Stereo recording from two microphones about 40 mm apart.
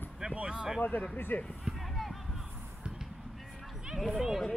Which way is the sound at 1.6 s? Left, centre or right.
Centre.